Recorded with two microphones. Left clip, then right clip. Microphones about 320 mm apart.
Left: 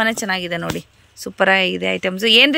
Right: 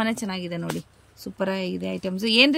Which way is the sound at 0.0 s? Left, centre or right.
Centre.